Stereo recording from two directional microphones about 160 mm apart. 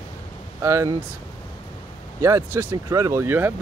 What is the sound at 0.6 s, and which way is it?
Speech, 15° right (ahead or behind).